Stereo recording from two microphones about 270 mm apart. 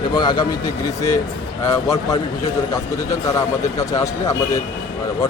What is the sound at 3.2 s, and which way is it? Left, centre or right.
Speech, centre.